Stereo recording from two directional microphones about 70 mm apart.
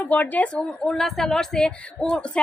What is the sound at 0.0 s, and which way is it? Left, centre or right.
A woman's voice, left.